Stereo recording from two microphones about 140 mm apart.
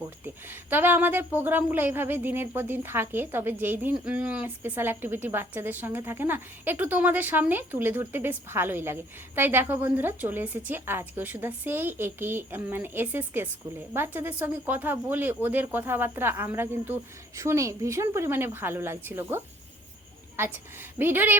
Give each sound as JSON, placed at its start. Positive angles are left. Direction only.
{"t": 0.7, "sound": "a woman's voice", "side_deg": -15}